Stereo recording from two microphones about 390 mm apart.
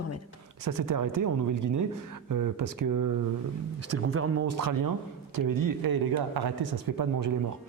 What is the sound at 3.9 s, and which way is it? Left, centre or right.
Speech, right.